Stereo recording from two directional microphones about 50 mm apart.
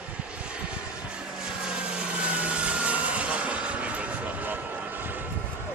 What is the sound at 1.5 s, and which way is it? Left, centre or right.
Vehicle, centre.